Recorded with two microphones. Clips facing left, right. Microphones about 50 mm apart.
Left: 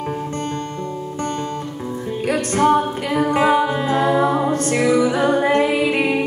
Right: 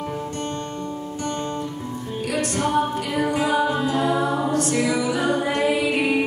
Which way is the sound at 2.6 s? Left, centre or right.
Left.